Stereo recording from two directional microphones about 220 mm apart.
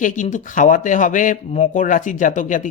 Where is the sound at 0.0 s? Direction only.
35° left (ahead or behind).